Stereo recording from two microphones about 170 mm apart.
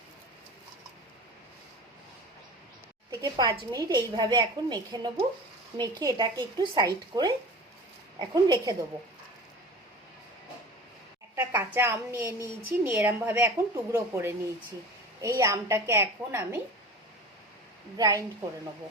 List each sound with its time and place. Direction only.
3.1 s a woman's voice: 20° right (ahead or behind)
11.3 s a woman's voice: 15° right (ahead or behind)
17.9 s a woman's voice: 20° right (ahead or behind)